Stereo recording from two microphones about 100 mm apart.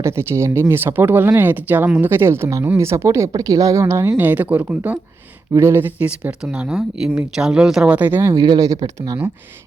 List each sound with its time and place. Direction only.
0.0 s speech: 25° right (ahead or behind); by 7.9 s 5° right (ahead or behind)
7.9 s speech: 20° right (ahead or behind)
8.2 s speech: 35° right (ahead or behind)